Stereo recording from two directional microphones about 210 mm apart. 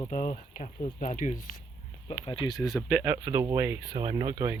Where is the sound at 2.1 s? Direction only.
25° left (ahead or behind).